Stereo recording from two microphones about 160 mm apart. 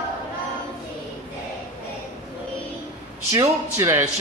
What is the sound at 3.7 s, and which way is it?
Speech, 20° right (ahead or behind).